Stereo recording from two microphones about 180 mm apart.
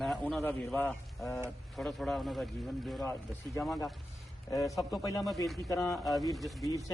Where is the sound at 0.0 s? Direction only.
Centre (ahead or behind).